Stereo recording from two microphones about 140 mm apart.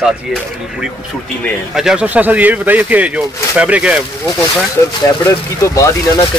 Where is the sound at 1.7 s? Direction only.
5° right (ahead or behind).